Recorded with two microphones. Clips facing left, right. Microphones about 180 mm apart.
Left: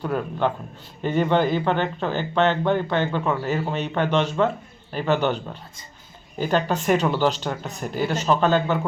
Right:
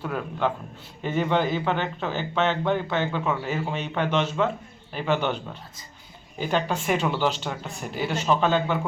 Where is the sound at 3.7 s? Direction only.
40° left (ahead or behind).